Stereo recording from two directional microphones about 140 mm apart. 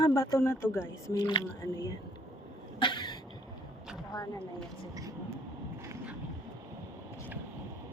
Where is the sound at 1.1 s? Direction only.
30° left (ahead or behind).